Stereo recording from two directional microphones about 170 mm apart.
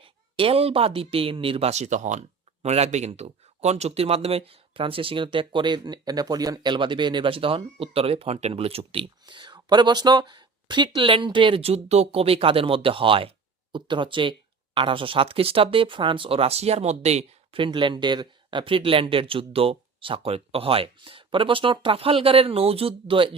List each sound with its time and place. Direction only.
0.0 s speech: 35° right (ahead or behind)